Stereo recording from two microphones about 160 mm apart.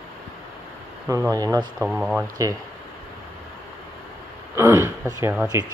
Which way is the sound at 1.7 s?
Centre (ahead or behind).